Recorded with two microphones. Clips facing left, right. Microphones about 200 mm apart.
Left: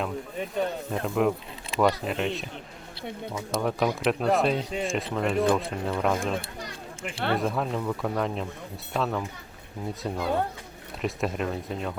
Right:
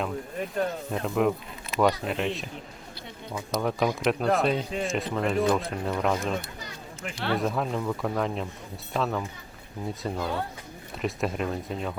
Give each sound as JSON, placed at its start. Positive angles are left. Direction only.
{"t": 0.0, "sound": "speech", "side_deg": 0}
{"t": 3.6, "sound": "speech", "side_deg": 0}
{"t": 7.3, "sound": "speech", "side_deg": 0}